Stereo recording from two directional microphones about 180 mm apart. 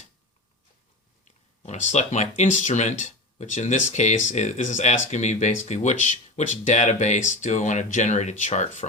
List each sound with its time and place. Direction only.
1.2 s speech: 40° left (ahead or behind)